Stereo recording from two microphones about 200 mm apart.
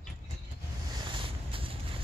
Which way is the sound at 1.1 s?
25° right (ahead or behind).